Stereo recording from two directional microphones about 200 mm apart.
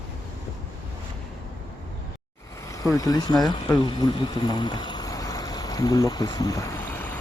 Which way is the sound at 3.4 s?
20° left (ahead or behind).